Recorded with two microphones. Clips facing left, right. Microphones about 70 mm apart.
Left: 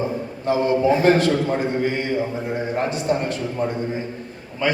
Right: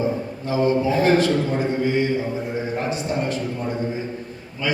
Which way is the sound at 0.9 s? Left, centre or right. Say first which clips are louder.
Left 5 dB; left.